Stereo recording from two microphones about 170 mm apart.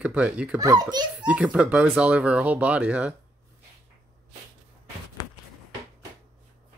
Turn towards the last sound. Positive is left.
turn(degrees=20)  # may be behind; listen again after turning